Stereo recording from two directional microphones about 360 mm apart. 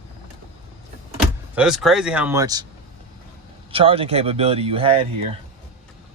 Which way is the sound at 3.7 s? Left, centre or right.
Centre.